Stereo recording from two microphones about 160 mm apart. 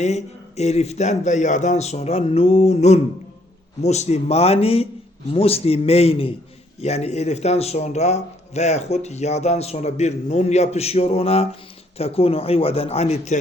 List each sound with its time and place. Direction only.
0.0 s a man's voice: 45° left (ahead or behind)